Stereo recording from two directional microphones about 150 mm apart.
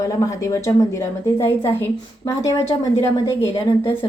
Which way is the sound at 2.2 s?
25° left (ahead or behind).